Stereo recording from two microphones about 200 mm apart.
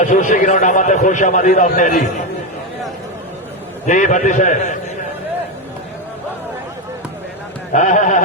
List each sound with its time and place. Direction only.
0.0 s a man's voice: 40° left (ahead or behind)
3.8 s a man's voice: 40° left (ahead or behind)
7.7 s a man's voice: 40° left (ahead or behind)